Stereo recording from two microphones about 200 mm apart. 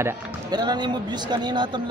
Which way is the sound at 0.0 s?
20° right (ahead or behind).